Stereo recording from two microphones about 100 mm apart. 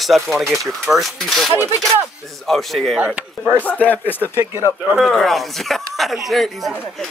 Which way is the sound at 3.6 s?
15° left (ahead or behind).